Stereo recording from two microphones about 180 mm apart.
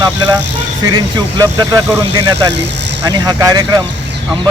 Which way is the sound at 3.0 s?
20° right (ahead or behind).